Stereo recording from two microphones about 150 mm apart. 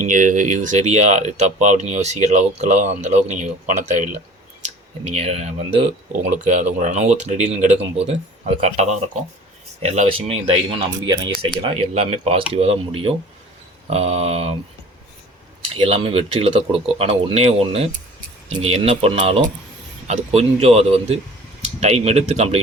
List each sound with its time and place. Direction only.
0.0 s speech: 60° right (ahead or behind)
4.6 s speech: 45° right (ahead or behind)
10.1 s speech: 40° right (ahead or behind)
11.9 s speech: 45° right (ahead or behind)
15.7 s speech: 40° right (ahead or behind)